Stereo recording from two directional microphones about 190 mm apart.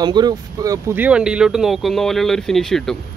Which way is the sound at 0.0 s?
20° right (ahead or behind).